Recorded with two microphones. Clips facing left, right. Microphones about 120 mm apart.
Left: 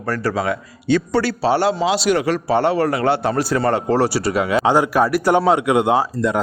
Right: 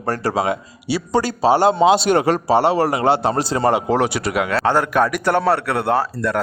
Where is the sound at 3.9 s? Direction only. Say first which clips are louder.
Left 1 dB; centre (ahead or behind).